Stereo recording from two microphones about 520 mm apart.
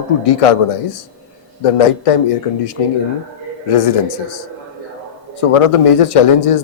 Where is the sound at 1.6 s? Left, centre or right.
Left.